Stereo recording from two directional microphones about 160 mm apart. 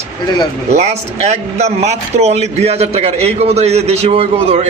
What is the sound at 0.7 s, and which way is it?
A man's voice, 45° right (ahead or behind).